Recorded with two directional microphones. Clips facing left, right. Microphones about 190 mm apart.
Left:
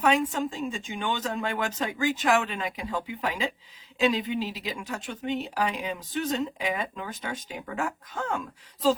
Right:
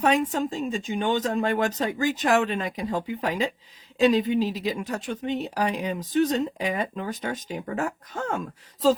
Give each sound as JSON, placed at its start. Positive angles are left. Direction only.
{"t": 0.0, "sound": "speech", "side_deg": -40}